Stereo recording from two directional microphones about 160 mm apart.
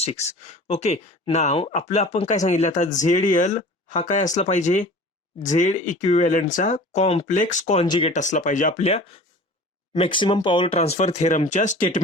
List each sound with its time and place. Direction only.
0.0 s speech: 45° left (ahead or behind)
7.9 s speech: 30° left (ahead or behind)
8.1 s speech: 50° left (ahead or behind)